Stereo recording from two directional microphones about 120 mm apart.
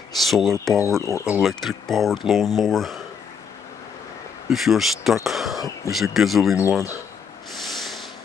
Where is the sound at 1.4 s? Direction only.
Centre (ahead or behind).